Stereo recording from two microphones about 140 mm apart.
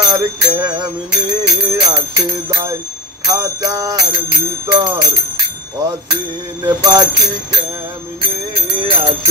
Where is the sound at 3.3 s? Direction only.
25° right (ahead or behind).